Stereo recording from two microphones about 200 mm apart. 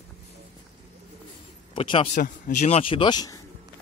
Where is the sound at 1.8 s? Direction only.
25° left (ahead or behind).